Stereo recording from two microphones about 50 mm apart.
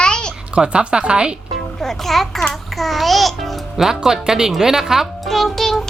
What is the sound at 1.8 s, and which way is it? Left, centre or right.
Music, centre.